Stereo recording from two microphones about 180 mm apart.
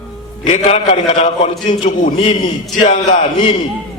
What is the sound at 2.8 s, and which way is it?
Speech, 40° left (ahead or behind).